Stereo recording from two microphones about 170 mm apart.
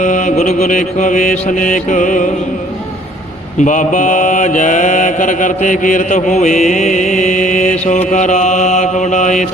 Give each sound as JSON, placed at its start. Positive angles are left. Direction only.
{"t": 0.0, "sound": "mantra", "side_deg": 45}
{"t": 3.6, "sound": "mantra", "side_deg": 45}